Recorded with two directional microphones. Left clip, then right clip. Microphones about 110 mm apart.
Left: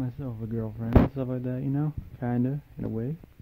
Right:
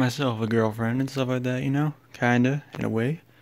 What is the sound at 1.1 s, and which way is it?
Speech, 25° right (ahead or behind).